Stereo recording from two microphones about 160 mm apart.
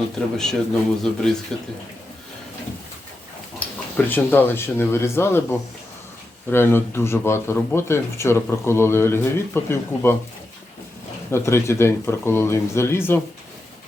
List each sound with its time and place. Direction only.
0.3 s a man's voice: 5° left (ahead or behind)
3.9 s speech: 10° left (ahead or behind)
11.3 s speech: 15° left (ahead or behind)